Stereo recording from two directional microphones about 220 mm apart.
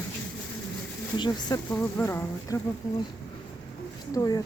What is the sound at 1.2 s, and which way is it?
Speech, 20° left (ahead or behind).